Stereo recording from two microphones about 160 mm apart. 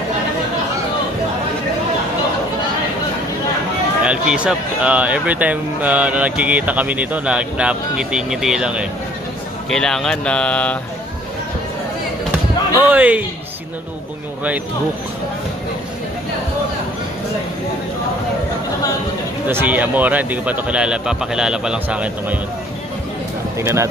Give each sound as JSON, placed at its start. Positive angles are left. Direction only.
{"t": 4.0, "sound": "speech", "side_deg": -5}
{"t": 12.7, "sound": "speech", "side_deg": -10}
{"t": 19.4, "sound": "speech", "side_deg": -10}
{"t": 23.6, "sound": "speech", "side_deg": -15}